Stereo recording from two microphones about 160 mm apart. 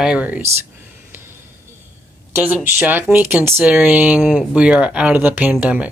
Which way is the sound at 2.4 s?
10° right (ahead or behind).